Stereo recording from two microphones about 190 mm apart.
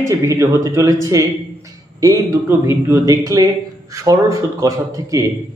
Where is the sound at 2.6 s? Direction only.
15° right (ahead or behind).